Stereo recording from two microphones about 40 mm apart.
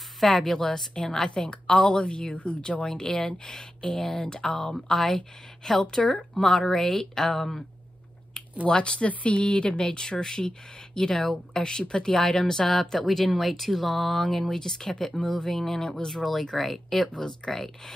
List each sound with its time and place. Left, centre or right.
0.2 s a woman's voice: centre
8.6 s a woman's voice: left
13.1 s speech: centre
17.1 s speech: centre